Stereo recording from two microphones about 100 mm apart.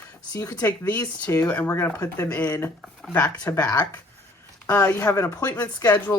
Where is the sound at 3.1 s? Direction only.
15° left (ahead or behind).